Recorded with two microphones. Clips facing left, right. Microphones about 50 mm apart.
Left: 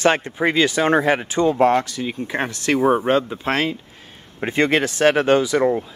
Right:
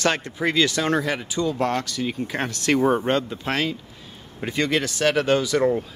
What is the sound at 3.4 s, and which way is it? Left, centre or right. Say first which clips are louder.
Speech: left 4 dB; left.